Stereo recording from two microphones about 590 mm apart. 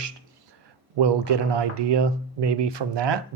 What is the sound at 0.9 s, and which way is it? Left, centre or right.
Speech, right.